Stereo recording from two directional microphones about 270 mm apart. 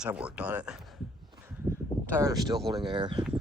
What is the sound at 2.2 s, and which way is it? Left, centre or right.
Speech, centre.